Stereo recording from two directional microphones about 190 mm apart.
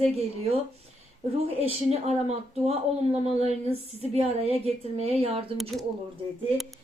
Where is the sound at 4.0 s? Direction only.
30° right (ahead or behind).